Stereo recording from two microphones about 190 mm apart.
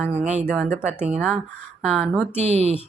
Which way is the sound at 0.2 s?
35° right (ahead or behind).